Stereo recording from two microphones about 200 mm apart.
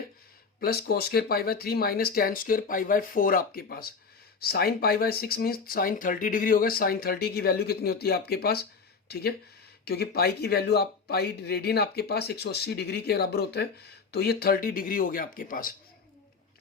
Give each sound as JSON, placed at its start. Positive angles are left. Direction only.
{"t": 0.6, "sound": "speech", "side_deg": 50}